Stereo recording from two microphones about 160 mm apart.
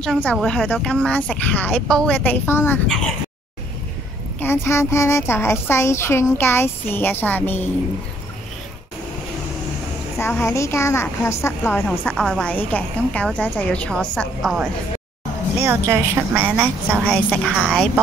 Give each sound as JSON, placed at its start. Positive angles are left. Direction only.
{"t": 0.0, "sound": "a child's voice", "side_deg": 5}
{"t": 4.4, "sound": "a child's voice", "side_deg": 15}
{"t": 10.1, "sound": "a child's voice", "side_deg": 15}
{"t": 15.6, "sound": "a woman's voice", "side_deg": -15}